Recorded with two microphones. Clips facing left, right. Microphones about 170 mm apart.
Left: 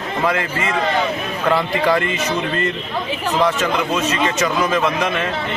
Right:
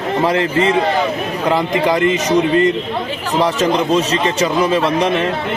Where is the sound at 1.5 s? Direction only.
20° right (ahead or behind).